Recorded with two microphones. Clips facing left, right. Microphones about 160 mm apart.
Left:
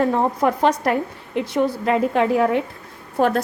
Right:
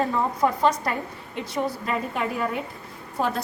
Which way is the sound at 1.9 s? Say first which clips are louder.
Left 9 dB; 80° left.